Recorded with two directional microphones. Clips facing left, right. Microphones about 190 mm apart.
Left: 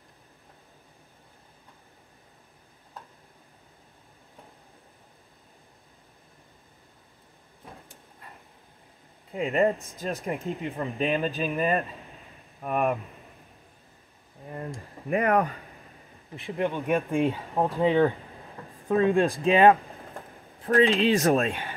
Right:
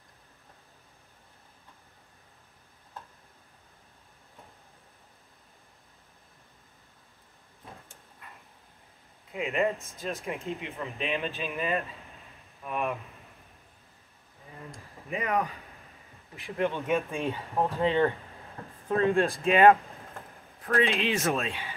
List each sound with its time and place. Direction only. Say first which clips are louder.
9.3 s speech: left 4 dB; 35° left (ahead or behind)
9.8 s speech: left 4 dB; 15° left (ahead or behind)
10.4 s speech: left 4 dB; 35° left (ahead or behind)
12.6 s speech: left 6 dB; 45° left (ahead or behind)
15.0 s speech: left 6 dB; 55° left (ahead or behind)
16.5 s speech: left 2 dB; 15° left (ahead or behind)
20.6 s speech: left 6 dB; 30° left (ahead or behind)
21.4 s speech: left 6 dB; 55° left (ahead or behind)